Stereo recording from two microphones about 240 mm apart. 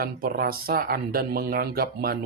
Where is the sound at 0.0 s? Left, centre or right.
Right.